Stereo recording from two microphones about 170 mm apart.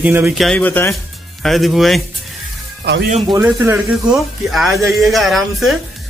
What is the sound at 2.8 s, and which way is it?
Speech, 75° right (ahead or behind).